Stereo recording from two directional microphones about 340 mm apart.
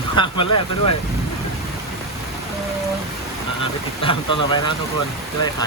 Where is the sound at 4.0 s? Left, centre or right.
Centre.